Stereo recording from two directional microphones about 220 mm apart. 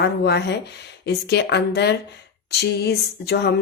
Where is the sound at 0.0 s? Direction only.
50° left (ahead or behind).